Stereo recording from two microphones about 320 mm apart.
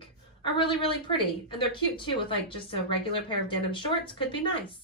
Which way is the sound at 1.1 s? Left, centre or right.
Centre.